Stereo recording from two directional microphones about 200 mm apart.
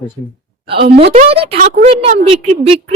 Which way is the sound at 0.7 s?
55° right (ahead or behind).